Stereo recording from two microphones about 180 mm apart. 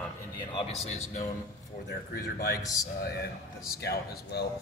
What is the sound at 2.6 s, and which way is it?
Speech, 20° left (ahead or behind).